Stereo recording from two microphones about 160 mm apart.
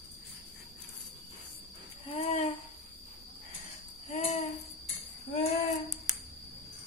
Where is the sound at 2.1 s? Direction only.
40° left (ahead or behind).